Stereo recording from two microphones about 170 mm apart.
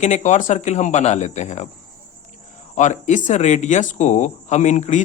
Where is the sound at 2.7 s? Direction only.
45° left (ahead or behind).